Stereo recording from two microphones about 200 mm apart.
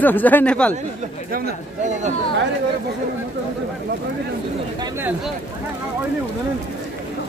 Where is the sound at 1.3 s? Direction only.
40° right (ahead or behind).